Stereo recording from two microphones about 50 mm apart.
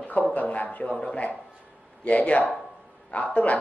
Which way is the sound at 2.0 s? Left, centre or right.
Left.